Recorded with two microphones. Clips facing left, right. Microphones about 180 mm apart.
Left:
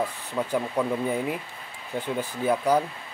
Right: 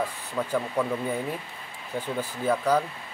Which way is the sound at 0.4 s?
15° left (ahead or behind).